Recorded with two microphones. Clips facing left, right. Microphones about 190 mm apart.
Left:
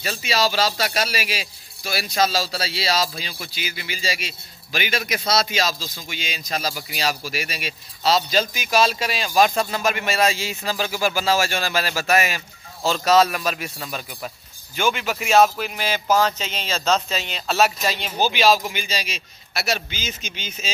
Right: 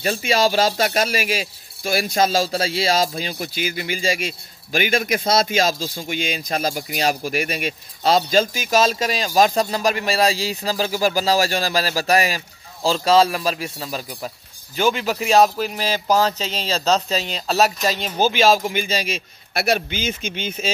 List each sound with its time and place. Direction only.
0.0 s a man's voice: 50° right (ahead or behind)